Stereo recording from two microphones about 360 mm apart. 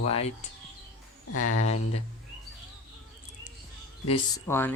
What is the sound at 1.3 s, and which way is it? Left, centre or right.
Speech, left.